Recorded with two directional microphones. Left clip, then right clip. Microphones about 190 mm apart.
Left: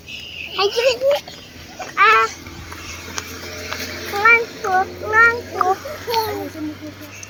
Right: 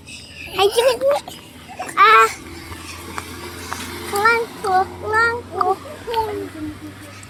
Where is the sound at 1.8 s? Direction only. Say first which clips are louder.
Right 2 dB; 20° right (ahead or behind).